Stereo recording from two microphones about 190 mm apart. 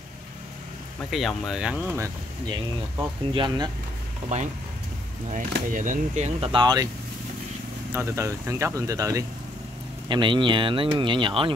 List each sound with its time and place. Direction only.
1.1 s speech: centre (ahead or behind)
3.0 s speech: 20° right (ahead or behind)
4.3 s speech: 40° right (ahead or behind)
5.5 s speech: 45° right (ahead or behind); by 6.9 s 20° right (ahead or behind)
7.9 s speech: 15° right (ahead or behind)